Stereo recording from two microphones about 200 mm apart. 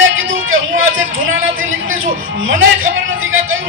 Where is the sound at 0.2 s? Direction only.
80° right.